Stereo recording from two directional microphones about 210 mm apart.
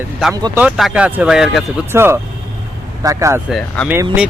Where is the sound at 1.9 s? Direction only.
10° right (ahead or behind).